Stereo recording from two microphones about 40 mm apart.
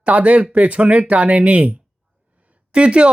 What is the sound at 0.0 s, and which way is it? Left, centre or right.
Speech, right.